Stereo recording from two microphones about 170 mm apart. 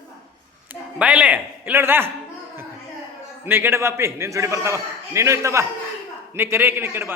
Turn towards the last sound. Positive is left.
turn(degrees=-15)  # may be behind; listen again after turning